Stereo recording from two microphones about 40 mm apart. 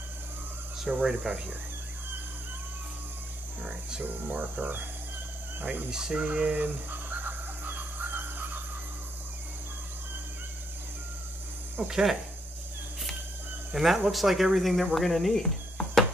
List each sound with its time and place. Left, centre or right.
0.8 s speech: centre
4.3 s speech: right
5.9 s speech: centre
6.1 s speech: right
6.9 s a sound: right
11.9 s speech: centre
13.7 s speech: centre
15.0 s a sound: centre